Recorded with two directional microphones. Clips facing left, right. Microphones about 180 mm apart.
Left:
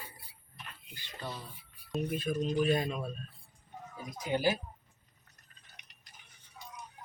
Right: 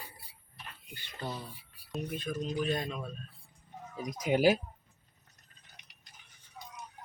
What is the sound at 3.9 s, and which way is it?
Speech, 75° right (ahead or behind).